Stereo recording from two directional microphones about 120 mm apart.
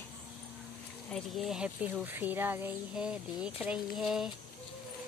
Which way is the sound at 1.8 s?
15° right (ahead or behind).